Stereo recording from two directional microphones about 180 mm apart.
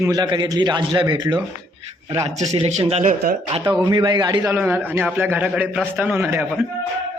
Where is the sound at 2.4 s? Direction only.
40° right (ahead or behind).